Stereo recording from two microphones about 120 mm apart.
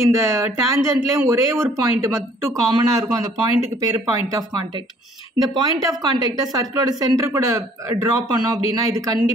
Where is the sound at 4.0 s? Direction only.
35° right (ahead or behind).